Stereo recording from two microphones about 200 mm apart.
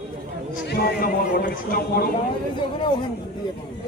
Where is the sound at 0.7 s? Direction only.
50° left (ahead or behind).